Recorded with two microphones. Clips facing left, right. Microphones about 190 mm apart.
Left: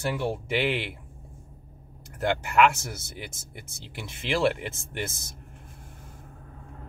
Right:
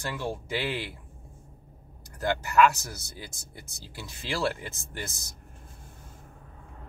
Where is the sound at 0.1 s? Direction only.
20° left (ahead or behind).